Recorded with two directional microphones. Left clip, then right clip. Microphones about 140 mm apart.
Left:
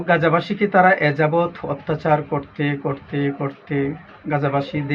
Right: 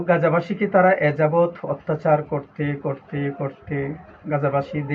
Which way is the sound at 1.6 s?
15° left (ahead or behind).